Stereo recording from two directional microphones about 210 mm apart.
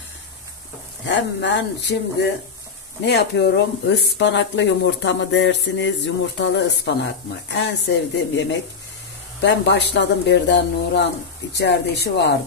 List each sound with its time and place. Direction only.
1.0 s speech: 55° left (ahead or behind)
9.4 s speech: 55° left (ahead or behind)